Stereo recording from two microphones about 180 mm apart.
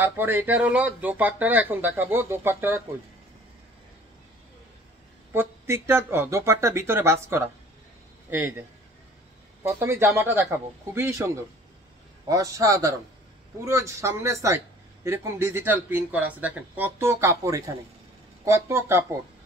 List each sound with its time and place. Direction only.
0.0 s speech: 10° right (ahead or behind)
5.3 s a man's voice: 15° right (ahead or behind)